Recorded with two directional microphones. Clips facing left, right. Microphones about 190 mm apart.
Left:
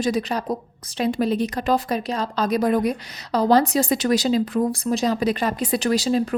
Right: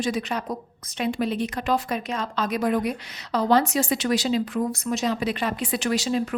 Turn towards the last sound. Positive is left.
turn(degrees=35)  # may be behind; listen again after turning